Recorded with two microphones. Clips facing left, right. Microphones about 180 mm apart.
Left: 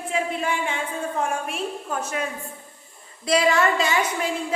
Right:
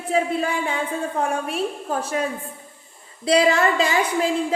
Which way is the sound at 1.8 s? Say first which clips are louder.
Right 4 dB; 35° right (ahead or behind).